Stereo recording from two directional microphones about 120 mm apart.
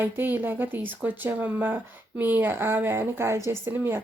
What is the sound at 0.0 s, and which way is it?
Speech, 15° right (ahead or behind).